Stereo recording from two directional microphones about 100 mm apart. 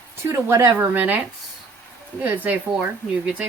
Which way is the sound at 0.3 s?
25° right (ahead or behind).